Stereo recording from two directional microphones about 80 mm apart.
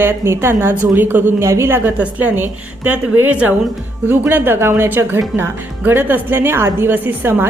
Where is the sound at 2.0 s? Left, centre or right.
Centre.